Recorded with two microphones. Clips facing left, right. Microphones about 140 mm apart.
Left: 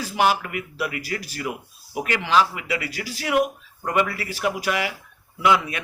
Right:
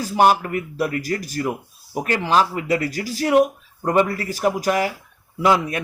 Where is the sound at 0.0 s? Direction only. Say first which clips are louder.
Right 5 dB; 45° right (ahead or behind).